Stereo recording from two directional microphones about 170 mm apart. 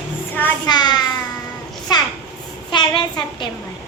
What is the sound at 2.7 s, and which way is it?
Speech, 25° left (ahead or behind).